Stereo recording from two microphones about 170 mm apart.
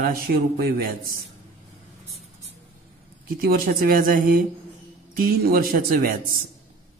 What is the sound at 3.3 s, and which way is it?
A man's voice, 60° right (ahead or behind).